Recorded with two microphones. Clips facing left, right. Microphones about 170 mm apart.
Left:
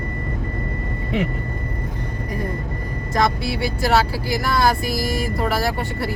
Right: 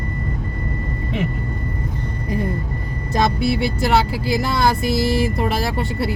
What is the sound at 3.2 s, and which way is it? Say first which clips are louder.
Speech: right 2 dB; 20° right (ahead or behind).